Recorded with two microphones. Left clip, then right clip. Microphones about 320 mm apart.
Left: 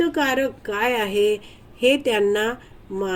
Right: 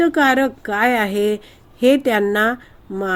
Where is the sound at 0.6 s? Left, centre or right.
Right.